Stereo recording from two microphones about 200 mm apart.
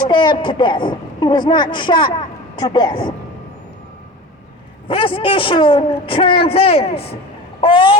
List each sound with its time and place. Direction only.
0.1 s a man's voice: 25° left (ahead or behind)
4.9 s a man's voice: 25° left (ahead or behind)